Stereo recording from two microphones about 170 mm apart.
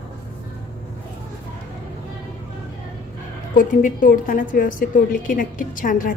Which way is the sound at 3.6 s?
50° left (ahead or behind).